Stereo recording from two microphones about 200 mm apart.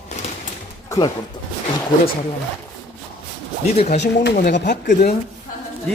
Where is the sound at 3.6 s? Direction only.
30° left (ahead or behind).